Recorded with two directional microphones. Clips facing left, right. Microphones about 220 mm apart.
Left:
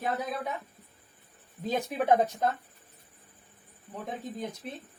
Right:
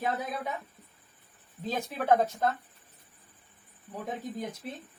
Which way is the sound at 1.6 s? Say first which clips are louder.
Left 2 dB; 15° left (ahead or behind).